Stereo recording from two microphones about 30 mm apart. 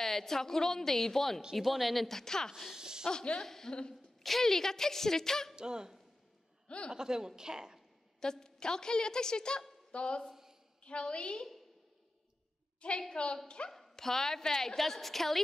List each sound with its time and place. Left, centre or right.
0.0 s a woman's voice: centre
1.6 s a woman's voice: centre
2.0 s a woman's voice: centre
2.7 s a sound: right
3.1 s a woman's voice: left
5.6 s a woman's voice: right
6.9 s a woman's voice: right
8.2 s a woman's voice: left
9.8 s a sound: left
10.8 s a woman's voice: left
13.1 s a woman's voice: left
13.7 s a woman's voice: centre